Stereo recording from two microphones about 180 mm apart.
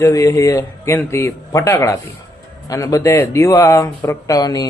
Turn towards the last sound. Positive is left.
turn(degrees=20)  # may be behind; listen again after turning